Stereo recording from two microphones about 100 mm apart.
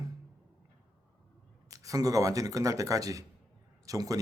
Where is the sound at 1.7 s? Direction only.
35° right (ahead or behind).